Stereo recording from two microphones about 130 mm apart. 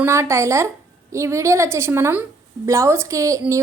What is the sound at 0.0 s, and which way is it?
Speech, 20° right (ahead or behind).